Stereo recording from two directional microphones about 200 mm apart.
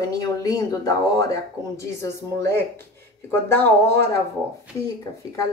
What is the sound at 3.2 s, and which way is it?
Speech, 10° left (ahead or behind).